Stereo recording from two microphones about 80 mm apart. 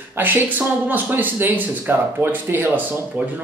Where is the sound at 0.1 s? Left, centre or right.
Right.